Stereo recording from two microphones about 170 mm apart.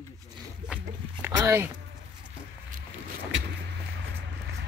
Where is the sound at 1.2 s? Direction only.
15° right (ahead or behind).